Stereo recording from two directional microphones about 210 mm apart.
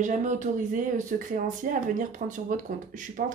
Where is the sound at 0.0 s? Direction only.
35° right (ahead or behind).